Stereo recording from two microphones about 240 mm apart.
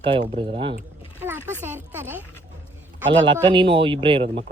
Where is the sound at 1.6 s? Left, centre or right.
Centre.